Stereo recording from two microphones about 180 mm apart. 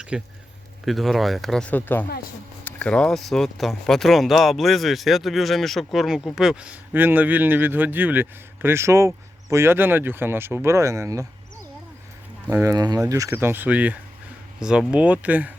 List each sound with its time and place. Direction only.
0.1 s speech: 5° right (ahead or behind)
12.5 s speech: 15° right (ahead or behind)